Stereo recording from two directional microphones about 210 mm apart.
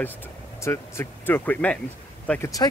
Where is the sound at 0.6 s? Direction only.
10° left (ahead or behind).